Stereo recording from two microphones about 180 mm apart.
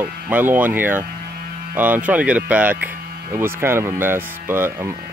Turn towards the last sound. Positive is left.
turn(degrees=-10)  # may be behind; listen again after turning